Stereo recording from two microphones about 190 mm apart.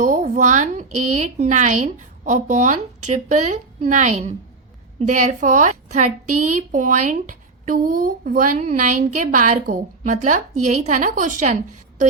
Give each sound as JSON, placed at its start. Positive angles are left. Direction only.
{"t": 0.0, "sound": "a woman's voice", "side_deg": -40}